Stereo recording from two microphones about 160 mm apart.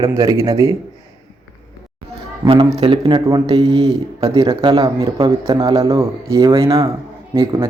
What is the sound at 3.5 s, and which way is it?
Speech, 35° right (ahead or behind).